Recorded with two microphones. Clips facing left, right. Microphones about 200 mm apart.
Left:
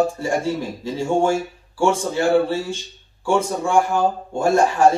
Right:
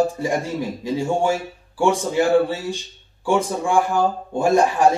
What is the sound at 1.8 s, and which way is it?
Speech, 15° right (ahead or behind).